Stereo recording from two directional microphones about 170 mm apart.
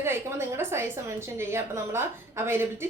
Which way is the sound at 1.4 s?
15° right (ahead or behind).